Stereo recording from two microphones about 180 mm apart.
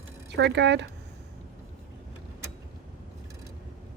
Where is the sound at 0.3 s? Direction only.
70° right (ahead or behind).